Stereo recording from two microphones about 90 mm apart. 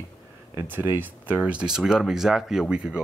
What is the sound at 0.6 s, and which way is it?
Speech, 20° right (ahead or behind).